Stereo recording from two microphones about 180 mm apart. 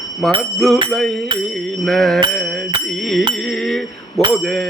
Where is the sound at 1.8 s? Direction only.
Centre (ahead or behind).